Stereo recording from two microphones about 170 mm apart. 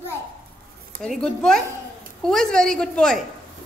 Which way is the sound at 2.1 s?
5° left (ahead or behind).